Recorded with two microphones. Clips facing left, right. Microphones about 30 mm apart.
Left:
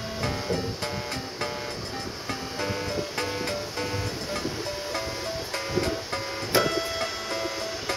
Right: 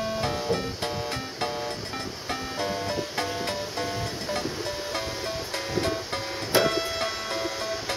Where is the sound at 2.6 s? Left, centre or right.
Centre.